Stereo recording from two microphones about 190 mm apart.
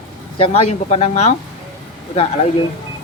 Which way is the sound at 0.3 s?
30° left (ahead or behind).